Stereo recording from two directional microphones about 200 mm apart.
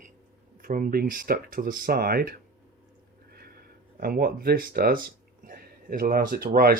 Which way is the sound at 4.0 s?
45° right (ahead or behind).